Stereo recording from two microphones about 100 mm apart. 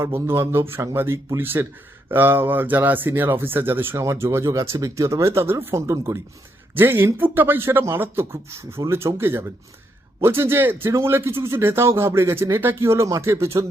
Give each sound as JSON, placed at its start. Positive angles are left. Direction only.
{"t": 0.0, "sound": "speech", "side_deg": -25}
{"t": 6.7, "sound": "speech", "side_deg": -20}